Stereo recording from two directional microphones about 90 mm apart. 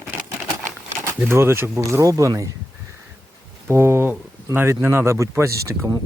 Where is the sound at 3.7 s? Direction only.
30° right (ahead or behind).